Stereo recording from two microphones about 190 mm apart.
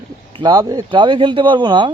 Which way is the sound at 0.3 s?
20° right (ahead or behind).